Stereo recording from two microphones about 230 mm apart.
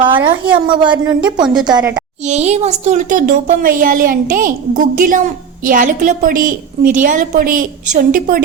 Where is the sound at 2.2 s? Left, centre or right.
Right.